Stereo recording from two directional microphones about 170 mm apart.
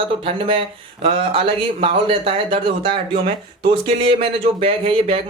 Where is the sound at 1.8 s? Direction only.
35° right (ahead or behind).